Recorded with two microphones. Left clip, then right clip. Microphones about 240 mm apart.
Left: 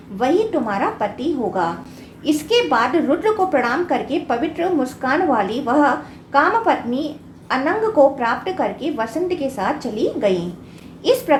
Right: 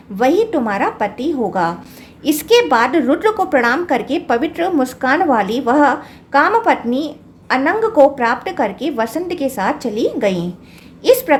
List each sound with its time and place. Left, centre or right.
0.2 s a woman's voice: right